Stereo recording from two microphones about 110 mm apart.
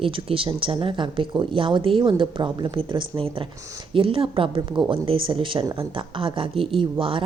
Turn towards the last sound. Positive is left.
turn(degrees=-50)  # may be behind; listen again after turning